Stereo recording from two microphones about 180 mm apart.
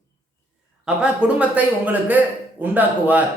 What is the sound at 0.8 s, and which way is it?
A man's voice, 5° right (ahead or behind).